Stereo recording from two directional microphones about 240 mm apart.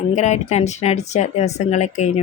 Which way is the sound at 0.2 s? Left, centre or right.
Left.